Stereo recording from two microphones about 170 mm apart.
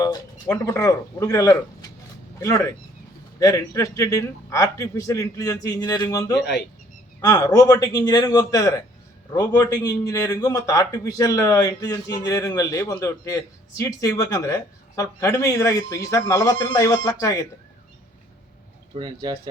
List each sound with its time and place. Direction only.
0.0 s a man's voice: 15° left (ahead or behind)
18.9 s speech: 25° right (ahead or behind)